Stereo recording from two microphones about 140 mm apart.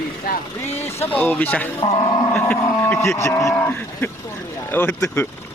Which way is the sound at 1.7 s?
45° left (ahead or behind).